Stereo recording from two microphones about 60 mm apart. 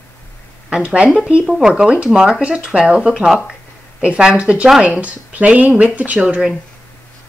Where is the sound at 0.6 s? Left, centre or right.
Centre.